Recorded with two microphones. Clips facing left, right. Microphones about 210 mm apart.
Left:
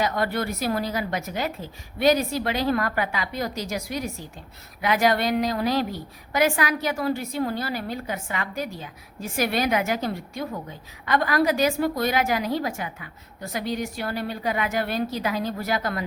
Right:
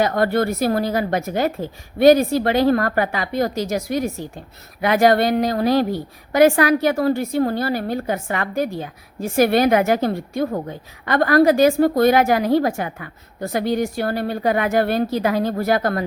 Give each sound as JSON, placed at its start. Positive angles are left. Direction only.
{"t": 0.0, "sound": "a woman's voice", "side_deg": -50}
{"t": 4.8, "sound": "a woman's voice", "side_deg": -55}